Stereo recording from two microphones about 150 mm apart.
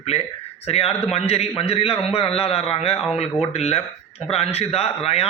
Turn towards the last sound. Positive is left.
turn(degrees=40)  # may be behind; listen again after turning